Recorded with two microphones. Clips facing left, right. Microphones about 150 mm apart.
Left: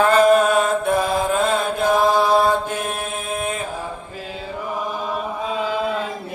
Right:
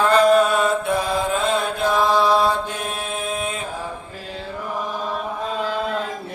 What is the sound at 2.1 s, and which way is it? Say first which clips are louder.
Mantra: left 1 dB; 50° left (ahead or behind).